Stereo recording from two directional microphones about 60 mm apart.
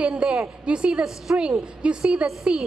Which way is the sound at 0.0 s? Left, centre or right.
Centre.